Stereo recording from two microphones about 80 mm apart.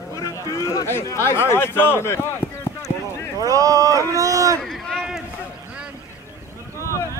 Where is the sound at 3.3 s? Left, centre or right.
Right.